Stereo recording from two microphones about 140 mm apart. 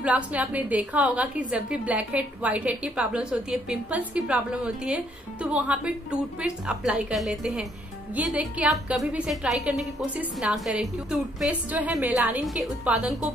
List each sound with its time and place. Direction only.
0.0 s a woman's voice: 10° right (ahead or behind)